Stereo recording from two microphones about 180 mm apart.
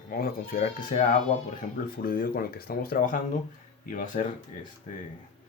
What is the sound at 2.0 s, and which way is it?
Speech, 55° left (ahead or behind).